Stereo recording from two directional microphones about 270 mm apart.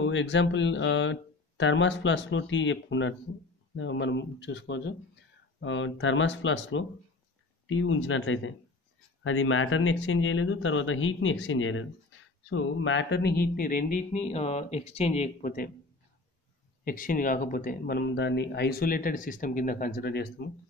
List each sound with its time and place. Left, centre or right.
0.0 s a man's voice: left
16.8 s speech: left